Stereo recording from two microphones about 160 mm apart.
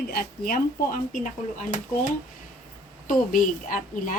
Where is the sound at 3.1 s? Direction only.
55° left (ahead or behind).